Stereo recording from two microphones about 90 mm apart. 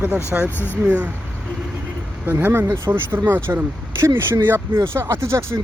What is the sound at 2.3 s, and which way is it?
Speech, 25° right (ahead or behind).